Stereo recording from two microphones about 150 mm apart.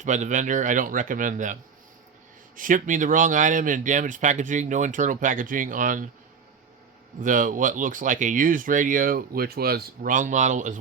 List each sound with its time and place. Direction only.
0.0 s speech: 55° right (ahead or behind)
2.6 s speech: 60° right (ahead or behind)
7.2 s speech: 60° right (ahead or behind)